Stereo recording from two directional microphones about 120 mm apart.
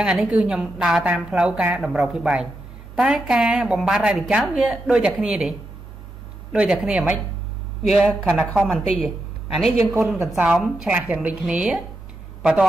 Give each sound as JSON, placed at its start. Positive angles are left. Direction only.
{"t": 0.0, "sound": "a woman's voice", "side_deg": -5}
{"t": 6.5, "sound": "a woman's voice", "side_deg": -5}
{"t": 9.9, "sound": "a woman's voice", "side_deg": -20}
{"t": 10.3, "sound": "a woman's voice", "side_deg": -5}